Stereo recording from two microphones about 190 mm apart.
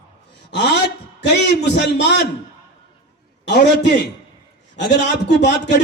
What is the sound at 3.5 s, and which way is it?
Speech, 65° left (ahead or behind).